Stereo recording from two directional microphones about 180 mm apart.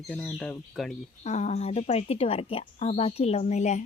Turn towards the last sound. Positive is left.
turn(degrees=40)  # may be behind; listen again after turning